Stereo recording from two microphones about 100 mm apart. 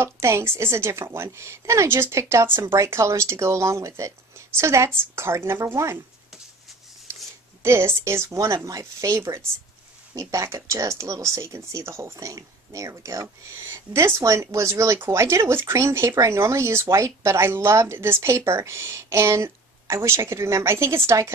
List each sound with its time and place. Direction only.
0.0 s speech: 25° right (ahead or behind)
7.1 s a sound: 25° right (ahead or behind)
7.6 s speech: 25° right (ahead or behind)